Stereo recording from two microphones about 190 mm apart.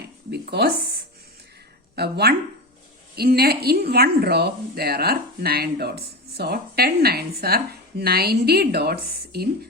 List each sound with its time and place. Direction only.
0.3 s a woman's voice: 60° right (ahead or behind)
2.0 s a woman's voice: 60° right (ahead or behind)